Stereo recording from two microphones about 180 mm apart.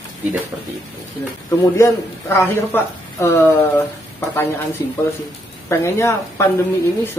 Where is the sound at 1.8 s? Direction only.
15° left (ahead or behind).